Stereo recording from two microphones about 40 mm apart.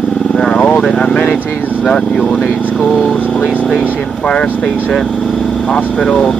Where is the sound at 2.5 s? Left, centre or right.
Left.